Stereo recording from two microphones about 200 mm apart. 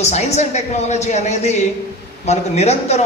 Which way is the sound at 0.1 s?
35° left (ahead or behind).